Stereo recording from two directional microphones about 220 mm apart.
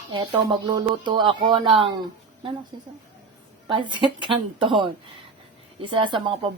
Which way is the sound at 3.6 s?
20° right (ahead or behind).